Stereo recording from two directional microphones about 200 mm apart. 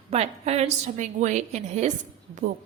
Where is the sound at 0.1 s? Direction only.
30° right (ahead or behind).